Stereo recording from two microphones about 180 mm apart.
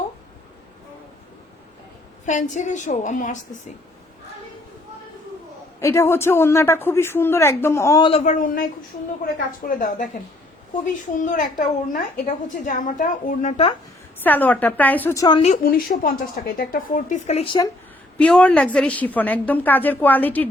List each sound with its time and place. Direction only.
2.2 s speech: 40° left (ahead or behind)
5.8 s a woman's voice: 15° left (ahead or behind)
8.1 s speech: 40° left (ahead or behind)
11.3 s speech: 45° left (ahead or behind)
14.3 s a woman's voice: 10° left (ahead or behind)
15.6 s speech: 55° left (ahead or behind); by 17.7 s 30° left (ahead or behind)
18.2 s a woman's voice: 5° left (ahead or behind)